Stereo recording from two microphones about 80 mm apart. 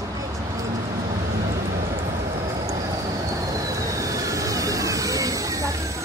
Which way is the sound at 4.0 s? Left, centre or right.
Right.